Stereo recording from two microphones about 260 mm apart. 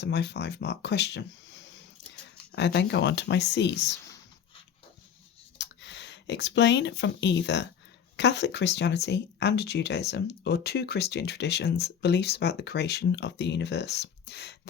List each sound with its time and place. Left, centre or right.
0.0 s speech: left
2.6 s speech: left
5.5 s speech: left